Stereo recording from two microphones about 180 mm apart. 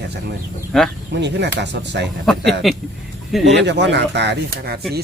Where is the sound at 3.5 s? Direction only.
75° right (ahead or behind).